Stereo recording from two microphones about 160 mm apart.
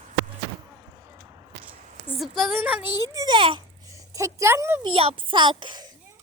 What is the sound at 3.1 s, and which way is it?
Speech, 25° right (ahead or behind).